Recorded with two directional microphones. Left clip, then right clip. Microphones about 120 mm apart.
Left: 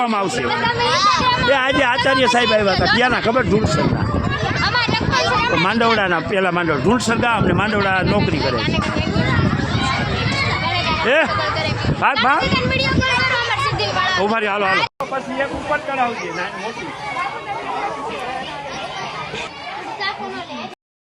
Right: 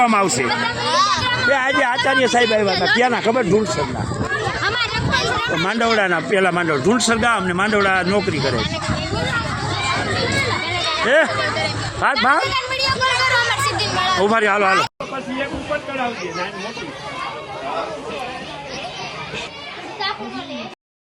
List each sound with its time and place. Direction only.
0.0 s speech: 15° right (ahead or behind)
0.8 s speech: 25° left (ahead or behind)
4.6 s a sound: 15° left (ahead or behind)
5.6 s a man's voice: 20° left (ahead or behind)
7.9 s speech: 25° left (ahead or behind)
11.0 s speech: 15° left (ahead or behind)
13.0 s vehicle: 15° right (ahead or behind)
13.7 s chatter: centre (ahead or behind)
14.3 s speech: 10° right (ahead or behind)
15.7 s a man's voice: 15° left (ahead or behind)